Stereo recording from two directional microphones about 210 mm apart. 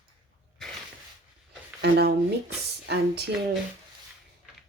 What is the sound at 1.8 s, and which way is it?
Speech, 50° right (ahead or behind).